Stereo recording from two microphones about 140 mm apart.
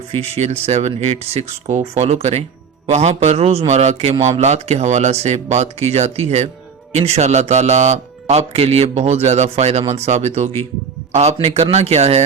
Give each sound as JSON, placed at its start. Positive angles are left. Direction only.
{"t": 0.1, "sound": "a man's voice", "side_deg": -45}